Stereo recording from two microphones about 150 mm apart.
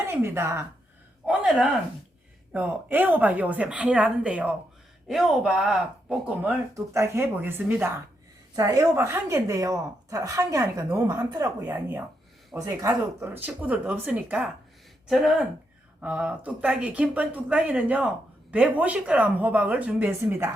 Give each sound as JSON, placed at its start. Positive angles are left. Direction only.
{"t": 0.0, "sound": "speech", "side_deg": -15}
{"t": 2.5, "sound": "a woman's voice", "side_deg": -10}
{"t": 11.6, "sound": "speech", "side_deg": -10}
{"t": 12.5, "sound": "speech", "side_deg": -25}